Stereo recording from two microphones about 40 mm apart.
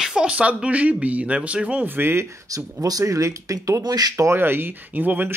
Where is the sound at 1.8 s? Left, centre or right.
Right.